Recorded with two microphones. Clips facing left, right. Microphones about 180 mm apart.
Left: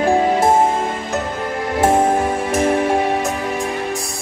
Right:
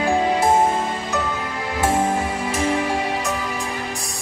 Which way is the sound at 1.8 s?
50° left (ahead or behind).